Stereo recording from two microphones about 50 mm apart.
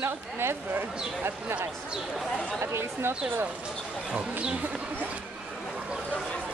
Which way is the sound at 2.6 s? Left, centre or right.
Right.